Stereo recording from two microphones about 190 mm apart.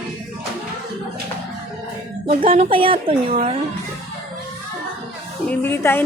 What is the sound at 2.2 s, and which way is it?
A woman's voice, 30° right (ahead or behind).